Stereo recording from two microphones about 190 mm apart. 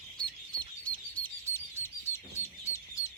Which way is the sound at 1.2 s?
10° left (ahead or behind).